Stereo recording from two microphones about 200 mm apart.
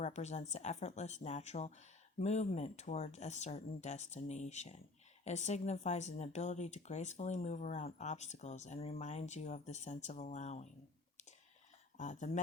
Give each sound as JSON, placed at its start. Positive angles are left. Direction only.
{"t": 0.0, "sound": "speech", "side_deg": 35}
{"t": 11.9, "sound": "speech", "side_deg": 40}